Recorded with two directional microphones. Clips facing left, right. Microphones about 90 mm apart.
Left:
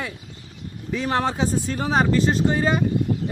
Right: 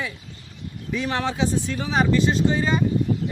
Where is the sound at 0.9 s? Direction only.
40° left (ahead or behind).